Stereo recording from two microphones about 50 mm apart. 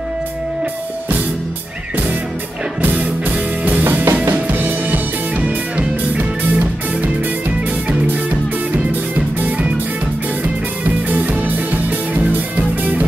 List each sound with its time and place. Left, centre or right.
2.8 s music: right
5.4 s music: right
11.1 s music: right